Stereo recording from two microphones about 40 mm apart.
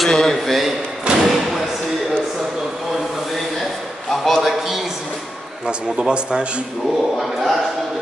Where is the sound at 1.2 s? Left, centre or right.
Centre.